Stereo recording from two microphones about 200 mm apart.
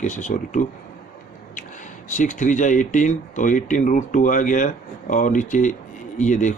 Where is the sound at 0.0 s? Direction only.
40° left (ahead or behind).